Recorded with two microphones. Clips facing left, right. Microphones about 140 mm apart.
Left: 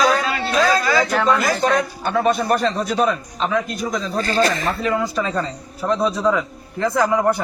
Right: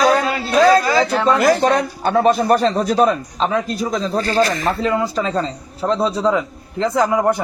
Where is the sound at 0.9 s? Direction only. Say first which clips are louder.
Right 2 dB; 25° right (ahead or behind).